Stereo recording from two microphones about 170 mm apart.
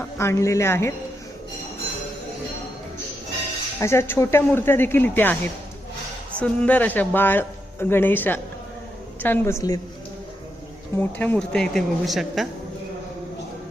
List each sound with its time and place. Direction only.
0.0 s speech: 15° left (ahead or behind)
3.8 s speech: 15° left (ahead or behind)
6.4 s speech: 10° left (ahead or behind)
10.9 s speech: 10° left (ahead or behind)